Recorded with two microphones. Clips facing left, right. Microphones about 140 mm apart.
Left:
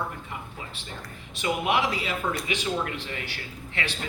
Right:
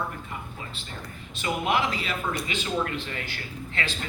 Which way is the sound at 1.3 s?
15° left (ahead or behind).